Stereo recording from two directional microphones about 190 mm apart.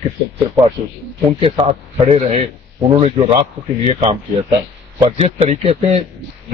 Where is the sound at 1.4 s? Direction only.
30° right (ahead or behind).